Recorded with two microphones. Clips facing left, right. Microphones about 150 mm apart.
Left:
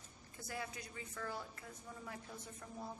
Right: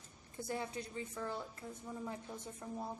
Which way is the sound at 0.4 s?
25° right (ahead or behind).